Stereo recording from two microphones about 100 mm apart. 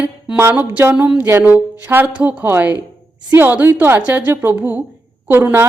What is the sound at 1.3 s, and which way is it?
A woman's voice, 20° right (ahead or behind).